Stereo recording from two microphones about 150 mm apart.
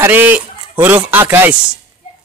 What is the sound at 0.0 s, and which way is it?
A man's voice, 10° right (ahead or behind).